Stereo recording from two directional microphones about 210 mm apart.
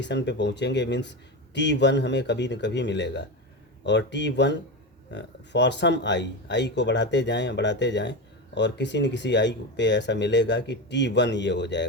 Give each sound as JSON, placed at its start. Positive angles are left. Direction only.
{"t": 0.0, "sound": "speech", "side_deg": 55}